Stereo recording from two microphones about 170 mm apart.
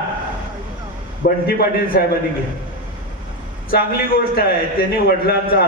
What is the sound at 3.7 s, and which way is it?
A man's voice, 65° left (ahead or behind).